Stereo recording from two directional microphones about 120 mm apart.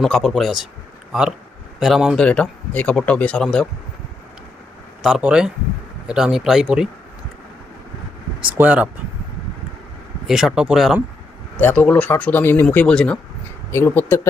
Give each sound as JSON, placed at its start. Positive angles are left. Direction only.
{"t": 0.0, "sound": "speech", "side_deg": 5}
{"t": 1.8, "sound": "speech", "side_deg": -5}
{"t": 2.2, "sound": "speech", "side_deg": 10}
{"t": 5.0, "sound": "speech", "side_deg": -5}
{"t": 8.4, "sound": "speech", "side_deg": -10}
{"t": 10.2, "sound": "speech", "side_deg": -5}
{"t": 11.6, "sound": "speech", "side_deg": 10}
{"t": 12.6, "sound": "speech", "side_deg": 5}
{"t": 13.7, "sound": "speech", "side_deg": 20}